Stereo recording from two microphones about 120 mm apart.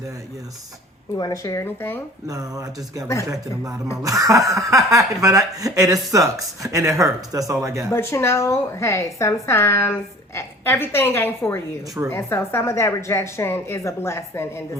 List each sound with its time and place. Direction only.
1.2 s a woman's voice: 30° left (ahead or behind)
2.2 s speech: 30° right (ahead or behind)
7.9 s a woman's voice: 20° left (ahead or behind)